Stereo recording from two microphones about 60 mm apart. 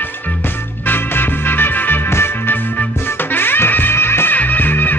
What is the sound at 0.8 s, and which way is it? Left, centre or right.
Music, left.